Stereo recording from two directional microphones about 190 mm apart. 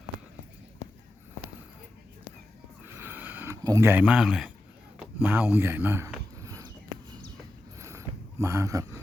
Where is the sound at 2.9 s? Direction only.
10° right (ahead or behind).